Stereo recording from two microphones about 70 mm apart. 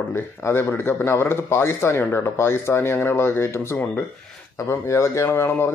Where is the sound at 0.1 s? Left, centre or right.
Left.